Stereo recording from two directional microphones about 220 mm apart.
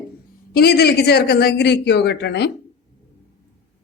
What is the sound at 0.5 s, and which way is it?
A man's voice, 45° left (ahead or behind).